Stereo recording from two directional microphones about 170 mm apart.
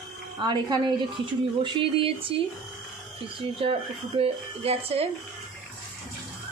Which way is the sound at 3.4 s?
35° right (ahead or behind).